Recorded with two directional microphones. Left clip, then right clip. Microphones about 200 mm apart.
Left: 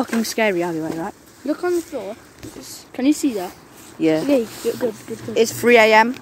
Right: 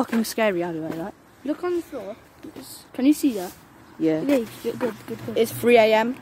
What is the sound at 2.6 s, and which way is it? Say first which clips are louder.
Speech: left 1 dB; 25° right (ahead or behind).